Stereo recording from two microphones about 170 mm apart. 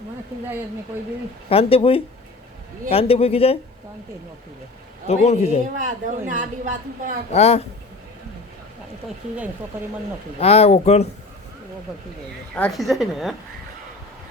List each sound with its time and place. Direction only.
1.5 s speech: 35° left (ahead or behind)
5.0 s speech: 40° left (ahead or behind)
5.7 s speech: 50° right (ahead or behind)
7.3 s speech: 40° left (ahead or behind)
10.4 s speech: 35° left (ahead or behind)
12.5 s a woman's voice: 5° left (ahead or behind)